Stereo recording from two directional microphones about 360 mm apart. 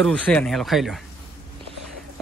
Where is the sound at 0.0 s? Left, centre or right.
Centre.